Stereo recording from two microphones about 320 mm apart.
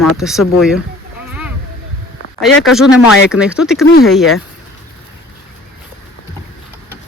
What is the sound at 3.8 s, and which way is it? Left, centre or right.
Speech, left.